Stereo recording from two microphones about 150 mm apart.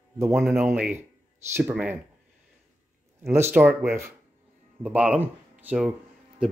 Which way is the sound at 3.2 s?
15° right (ahead or behind).